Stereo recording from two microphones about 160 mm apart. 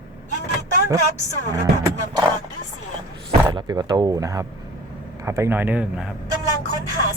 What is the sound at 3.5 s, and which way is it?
Speech, 30° right (ahead or behind).